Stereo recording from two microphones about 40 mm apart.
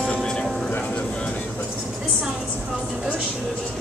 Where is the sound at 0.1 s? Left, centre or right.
Left.